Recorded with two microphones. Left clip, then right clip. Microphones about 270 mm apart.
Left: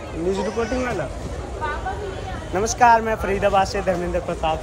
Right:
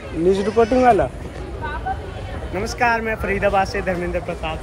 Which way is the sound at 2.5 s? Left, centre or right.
Centre.